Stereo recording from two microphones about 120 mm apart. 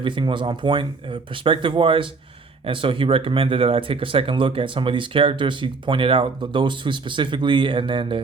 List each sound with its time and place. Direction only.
0.0 s speech: 45° right (ahead or behind)